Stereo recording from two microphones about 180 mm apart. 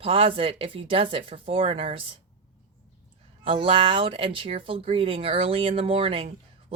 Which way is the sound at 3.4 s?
30° right (ahead or behind).